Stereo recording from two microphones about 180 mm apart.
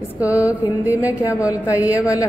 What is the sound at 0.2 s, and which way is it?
A woman's voice, 10° right (ahead or behind).